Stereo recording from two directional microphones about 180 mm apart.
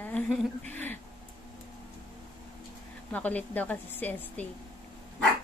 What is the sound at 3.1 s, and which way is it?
A woman's voice, 10° left (ahead or behind).